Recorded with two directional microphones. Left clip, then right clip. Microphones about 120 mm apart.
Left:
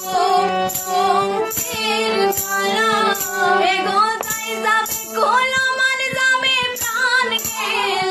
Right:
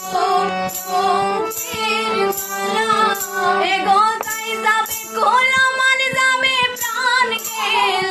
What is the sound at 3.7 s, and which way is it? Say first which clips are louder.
Music: right 2 dB; 15° right (ahead or behind).